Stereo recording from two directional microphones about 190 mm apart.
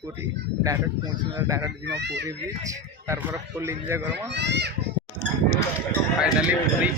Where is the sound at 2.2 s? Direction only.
15° right (ahead or behind).